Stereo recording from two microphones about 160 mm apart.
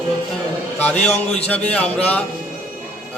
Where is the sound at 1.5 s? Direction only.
10° left (ahead or behind).